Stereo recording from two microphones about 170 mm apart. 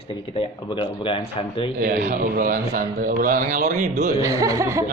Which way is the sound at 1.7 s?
70° right (ahead or behind).